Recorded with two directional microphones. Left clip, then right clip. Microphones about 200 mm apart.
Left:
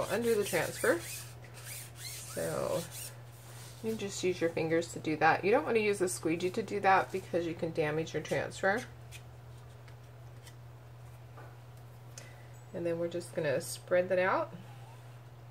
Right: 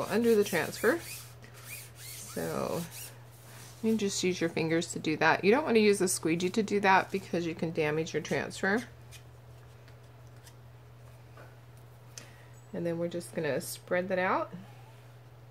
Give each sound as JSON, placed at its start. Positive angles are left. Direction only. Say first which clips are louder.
{"t": 0.1, "sound": "speech", "louder": "right 6 dB", "side_deg": -45}
{"t": 2.4, "sound": "speech", "louder": "even", "side_deg": -40}
{"t": 3.8, "sound": "speech", "louder": "right 4 dB", "side_deg": -45}
{"t": 12.7, "sound": "speech", "louder": "right 1 dB", "side_deg": -45}